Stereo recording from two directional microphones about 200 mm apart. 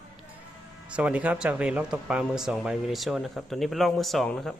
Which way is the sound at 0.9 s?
5° right (ahead or behind).